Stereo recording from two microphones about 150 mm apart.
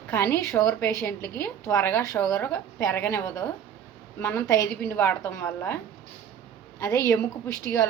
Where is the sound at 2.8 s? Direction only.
15° left (ahead or behind).